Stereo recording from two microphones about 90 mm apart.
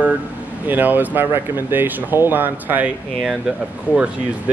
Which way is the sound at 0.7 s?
20° right (ahead or behind).